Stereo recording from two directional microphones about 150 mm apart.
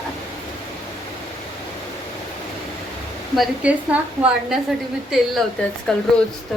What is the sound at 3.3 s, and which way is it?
A woman's voice, 10° right (ahead or behind).